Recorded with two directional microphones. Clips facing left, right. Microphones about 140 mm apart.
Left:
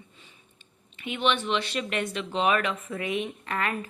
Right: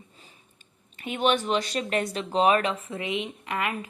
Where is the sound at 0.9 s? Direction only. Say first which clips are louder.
Right 2 dB; 40° right (ahead or behind).